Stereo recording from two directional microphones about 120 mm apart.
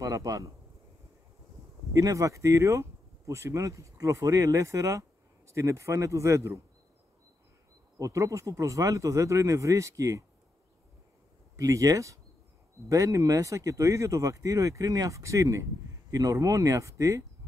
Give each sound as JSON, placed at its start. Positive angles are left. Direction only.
{"t": 0.0, "sound": "speech", "side_deg": -30}
{"t": 2.0, "sound": "speech", "side_deg": -25}
{"t": 8.0, "sound": "speech", "side_deg": -25}
{"t": 11.5, "sound": "speech", "side_deg": -30}